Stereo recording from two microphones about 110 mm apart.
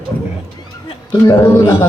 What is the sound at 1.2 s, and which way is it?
Speech, 30° left (ahead or behind).